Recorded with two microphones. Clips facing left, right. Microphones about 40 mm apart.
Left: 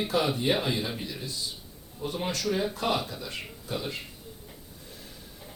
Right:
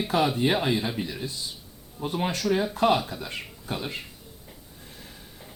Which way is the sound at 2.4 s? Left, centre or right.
Centre.